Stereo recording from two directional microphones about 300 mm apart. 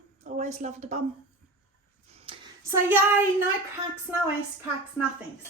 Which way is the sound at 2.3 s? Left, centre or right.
Centre.